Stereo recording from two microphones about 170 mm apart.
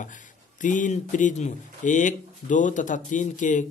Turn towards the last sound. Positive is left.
turn(degrees=45)  # may be behind; listen again after turning